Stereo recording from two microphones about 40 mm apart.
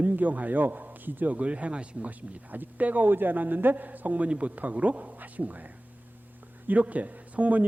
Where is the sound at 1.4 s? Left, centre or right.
Right.